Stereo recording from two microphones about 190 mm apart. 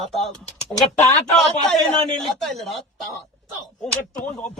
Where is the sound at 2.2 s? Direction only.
Centre (ahead or behind).